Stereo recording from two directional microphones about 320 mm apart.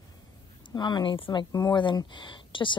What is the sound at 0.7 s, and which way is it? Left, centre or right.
Speech, centre.